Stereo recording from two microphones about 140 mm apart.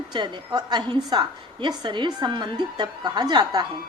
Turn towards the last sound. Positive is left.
turn(degrees=-30)  # may be behind; listen again after turning